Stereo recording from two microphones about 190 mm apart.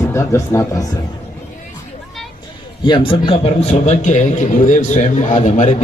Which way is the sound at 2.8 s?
25° left (ahead or behind).